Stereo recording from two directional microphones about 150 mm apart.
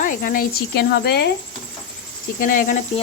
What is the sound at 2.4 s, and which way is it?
Speech, 65° left (ahead or behind).